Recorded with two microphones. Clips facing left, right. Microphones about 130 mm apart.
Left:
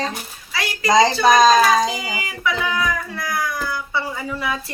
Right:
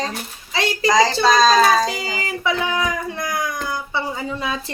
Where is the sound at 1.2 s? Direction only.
20° left (ahead or behind).